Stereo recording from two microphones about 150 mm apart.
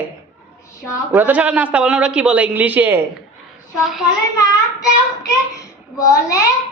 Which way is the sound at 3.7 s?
Centre (ahead or behind).